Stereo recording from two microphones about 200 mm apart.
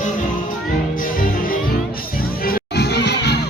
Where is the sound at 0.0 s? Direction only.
40° left (ahead or behind).